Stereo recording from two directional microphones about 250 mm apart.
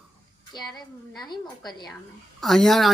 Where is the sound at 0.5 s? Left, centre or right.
Centre.